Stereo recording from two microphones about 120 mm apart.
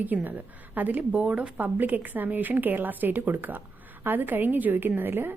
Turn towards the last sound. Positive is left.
turn(degrees=-15)  # may be behind; listen again after turning